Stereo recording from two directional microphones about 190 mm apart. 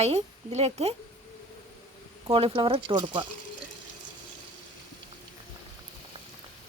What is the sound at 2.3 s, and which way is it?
Speech, 30° right (ahead or behind).